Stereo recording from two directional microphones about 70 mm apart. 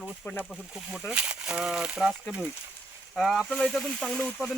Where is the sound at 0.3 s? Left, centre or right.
Left.